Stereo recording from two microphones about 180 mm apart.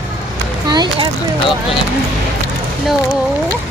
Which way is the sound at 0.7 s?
25° right (ahead or behind).